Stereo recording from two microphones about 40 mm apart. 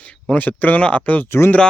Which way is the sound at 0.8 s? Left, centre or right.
Left.